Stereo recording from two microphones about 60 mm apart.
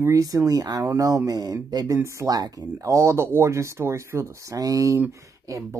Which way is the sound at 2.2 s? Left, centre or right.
Right.